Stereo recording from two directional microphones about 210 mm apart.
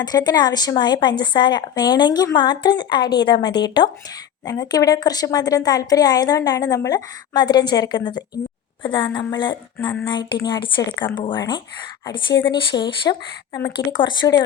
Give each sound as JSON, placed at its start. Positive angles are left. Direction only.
{"t": 0.0, "sound": "a woman's voice", "side_deg": 20}